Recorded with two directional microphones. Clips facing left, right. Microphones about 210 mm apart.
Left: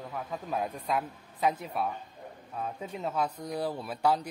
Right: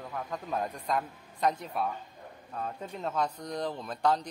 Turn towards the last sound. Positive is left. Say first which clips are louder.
# left 1 dB
turn(degrees=10)  # may be behind; listen again after turning